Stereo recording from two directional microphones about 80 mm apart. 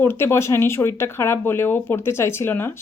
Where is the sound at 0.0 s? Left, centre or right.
Left.